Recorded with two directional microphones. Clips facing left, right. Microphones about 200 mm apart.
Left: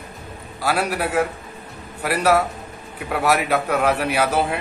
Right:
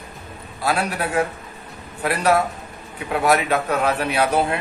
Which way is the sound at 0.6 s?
5° left (ahead or behind).